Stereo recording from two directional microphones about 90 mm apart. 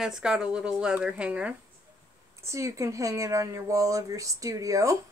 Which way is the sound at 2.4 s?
35° right (ahead or behind).